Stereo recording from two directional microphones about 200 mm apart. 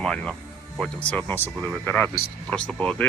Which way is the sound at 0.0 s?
Centre (ahead or behind).